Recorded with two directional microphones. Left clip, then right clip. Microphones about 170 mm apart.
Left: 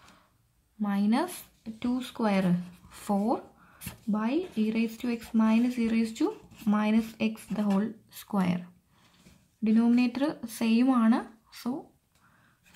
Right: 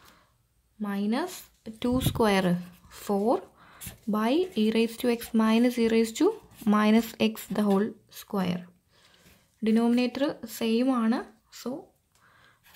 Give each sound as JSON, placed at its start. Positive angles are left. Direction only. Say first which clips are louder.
{"t": 0.7, "sound": "speech", "louder": "left 2 dB", "side_deg": -10}
{"t": 1.6, "sound": "speech", "louder": "right 5 dB", "side_deg": -35}
{"t": 2.9, "sound": "speech", "louder": "right 4 dB", "side_deg": -20}
{"t": 3.6, "sound": "speech", "louder": "even", "side_deg": -40}
{"t": 8.1, "sound": "speech", "louder": "even", "side_deg": -15}
{"t": 9.6, "sound": "speech", "louder": "right 1 dB", "side_deg": -35}